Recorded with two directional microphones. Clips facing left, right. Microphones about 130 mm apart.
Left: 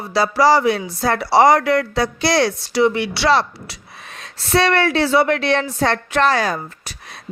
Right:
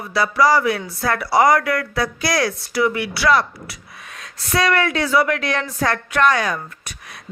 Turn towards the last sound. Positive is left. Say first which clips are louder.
# left 2 dB
turn(degrees=30)  # may be behind; listen again after turning